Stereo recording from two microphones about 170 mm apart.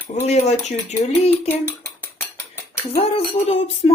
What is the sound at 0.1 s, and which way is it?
Speech, 40° left (ahead or behind).